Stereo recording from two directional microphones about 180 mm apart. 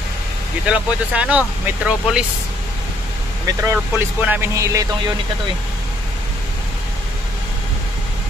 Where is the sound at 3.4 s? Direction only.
15° right (ahead or behind).